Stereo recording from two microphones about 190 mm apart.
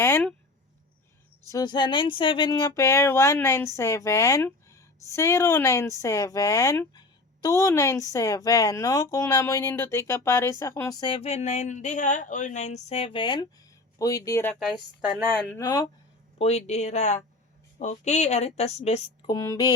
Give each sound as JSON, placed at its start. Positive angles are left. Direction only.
{"t": 0.0, "sound": "speech", "side_deg": 10}
{"t": 1.5, "sound": "a woman's voice", "side_deg": 20}
{"t": 16.4, "sound": "a woman's voice", "side_deg": 35}
{"t": 19.3, "sound": "a woman's voice", "side_deg": 20}